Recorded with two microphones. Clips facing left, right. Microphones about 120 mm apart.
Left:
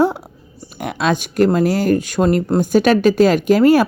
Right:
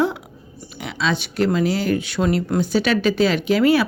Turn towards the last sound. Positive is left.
turn(degrees=45)  # may be behind; listen again after turning